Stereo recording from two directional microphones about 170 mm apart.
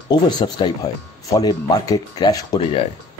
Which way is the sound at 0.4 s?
25° left (ahead or behind).